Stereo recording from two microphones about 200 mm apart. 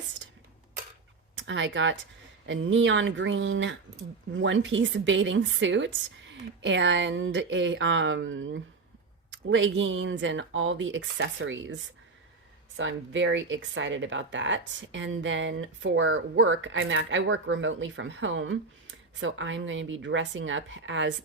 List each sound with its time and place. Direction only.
1.4 s speech: 70° right (ahead or behind)